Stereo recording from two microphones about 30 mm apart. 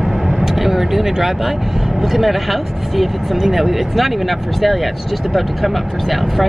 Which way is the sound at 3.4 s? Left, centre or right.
Centre.